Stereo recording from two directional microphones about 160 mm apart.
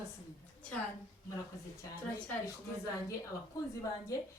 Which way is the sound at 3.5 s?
20° left (ahead or behind).